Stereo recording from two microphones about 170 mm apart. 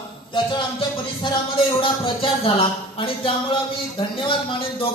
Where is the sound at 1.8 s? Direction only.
30° left (ahead or behind).